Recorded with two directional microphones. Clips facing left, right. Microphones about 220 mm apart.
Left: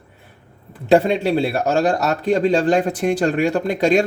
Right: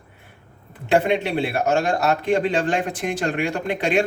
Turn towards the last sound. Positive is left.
turn(degrees=40)  # may be behind; listen again after turning